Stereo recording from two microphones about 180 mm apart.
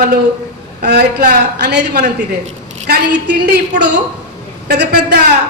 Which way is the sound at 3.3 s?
65° right (ahead or behind).